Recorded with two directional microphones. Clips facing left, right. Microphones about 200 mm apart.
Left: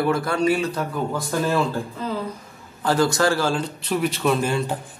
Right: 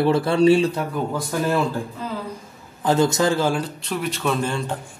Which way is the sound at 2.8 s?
20° right (ahead or behind).